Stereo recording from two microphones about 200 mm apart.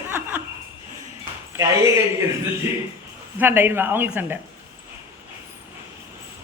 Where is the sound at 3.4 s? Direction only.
10° right (ahead or behind).